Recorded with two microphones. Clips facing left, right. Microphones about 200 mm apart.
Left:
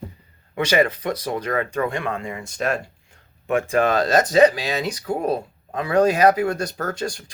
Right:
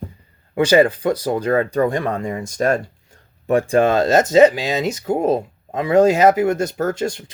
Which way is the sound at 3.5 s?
35° right (ahead or behind).